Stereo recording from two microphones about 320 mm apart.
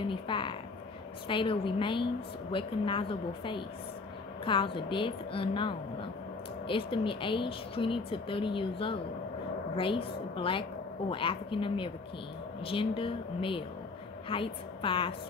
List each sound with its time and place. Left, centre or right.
0.1 s speech: centre